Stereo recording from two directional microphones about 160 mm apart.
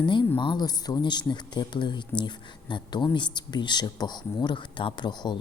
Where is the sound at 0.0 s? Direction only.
30° left (ahead or behind).